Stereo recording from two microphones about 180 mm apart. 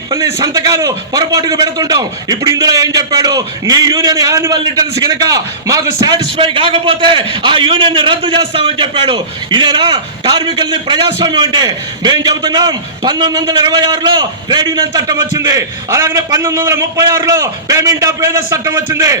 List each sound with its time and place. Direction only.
0.3 s a man's voice: 20° right (ahead or behind)